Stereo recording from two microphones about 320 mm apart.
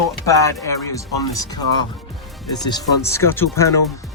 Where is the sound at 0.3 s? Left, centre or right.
Centre.